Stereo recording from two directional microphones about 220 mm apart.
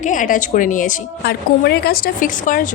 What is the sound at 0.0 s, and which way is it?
A woman's voice, 35° left (ahead or behind).